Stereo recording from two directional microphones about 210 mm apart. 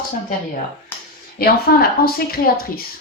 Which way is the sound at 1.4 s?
45° left (ahead or behind).